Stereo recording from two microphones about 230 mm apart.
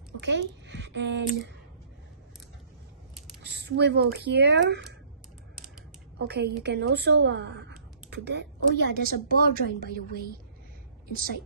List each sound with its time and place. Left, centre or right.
0.2 s a child's voice: right
3.5 s speech: right
6.1 s a woman's voice: right